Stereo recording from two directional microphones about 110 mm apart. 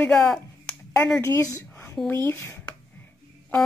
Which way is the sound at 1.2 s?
25° left (ahead or behind).